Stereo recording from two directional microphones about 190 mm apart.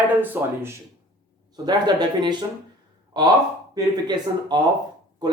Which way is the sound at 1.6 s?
20° right (ahead or behind).